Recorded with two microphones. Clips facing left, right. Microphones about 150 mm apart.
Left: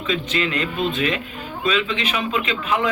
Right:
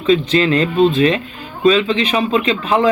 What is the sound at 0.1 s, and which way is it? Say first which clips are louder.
A man's voice: right 10 dB; 35° right (ahead or behind).